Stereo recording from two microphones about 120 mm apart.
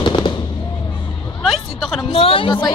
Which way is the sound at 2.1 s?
50° left (ahead or behind).